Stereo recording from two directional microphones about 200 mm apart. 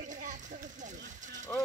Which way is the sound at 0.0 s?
40° right (ahead or behind).